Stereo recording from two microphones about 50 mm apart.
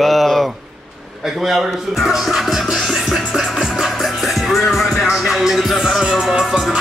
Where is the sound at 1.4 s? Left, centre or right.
Centre.